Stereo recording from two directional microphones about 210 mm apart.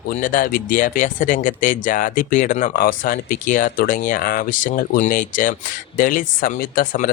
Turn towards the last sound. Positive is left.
turn(degrees=40)  # may be behind; listen again after turning